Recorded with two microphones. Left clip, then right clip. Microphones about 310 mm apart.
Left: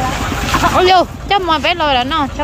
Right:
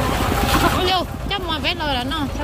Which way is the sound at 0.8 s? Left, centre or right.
Centre.